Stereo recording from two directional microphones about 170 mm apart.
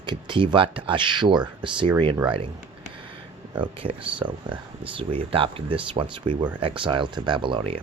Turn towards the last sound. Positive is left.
turn(degrees=-30)  # may be behind; listen again after turning